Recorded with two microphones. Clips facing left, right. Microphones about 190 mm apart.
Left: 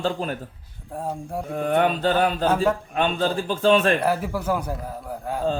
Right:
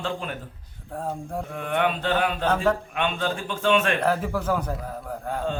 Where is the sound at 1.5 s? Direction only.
40° left (ahead or behind).